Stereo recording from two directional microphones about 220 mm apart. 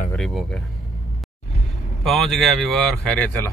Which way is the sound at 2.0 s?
Centre (ahead or behind).